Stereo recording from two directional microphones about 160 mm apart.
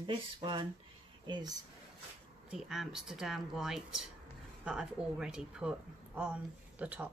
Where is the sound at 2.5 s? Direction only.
5° right (ahead or behind).